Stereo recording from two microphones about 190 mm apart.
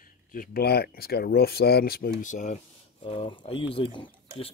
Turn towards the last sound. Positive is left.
turn(degrees=30)  # may be behind; listen again after turning